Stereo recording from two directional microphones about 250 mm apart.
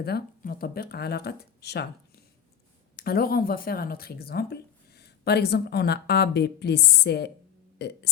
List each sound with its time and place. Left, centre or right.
0.0 s speech: left